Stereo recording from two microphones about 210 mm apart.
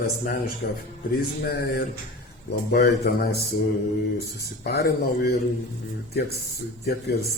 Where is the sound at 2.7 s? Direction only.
50° left (ahead or behind).